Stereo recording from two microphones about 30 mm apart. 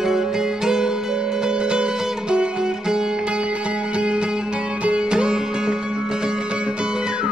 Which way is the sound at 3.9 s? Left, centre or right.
Right.